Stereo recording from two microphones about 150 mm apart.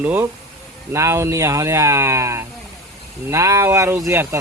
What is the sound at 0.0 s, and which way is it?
Speech, 10° right (ahead or behind).